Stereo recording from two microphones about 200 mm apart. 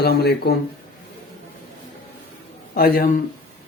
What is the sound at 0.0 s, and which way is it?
Speech, 50° left (ahead or behind).